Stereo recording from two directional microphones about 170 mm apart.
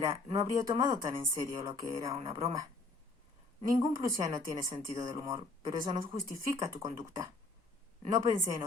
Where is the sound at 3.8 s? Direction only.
20° right (ahead or behind).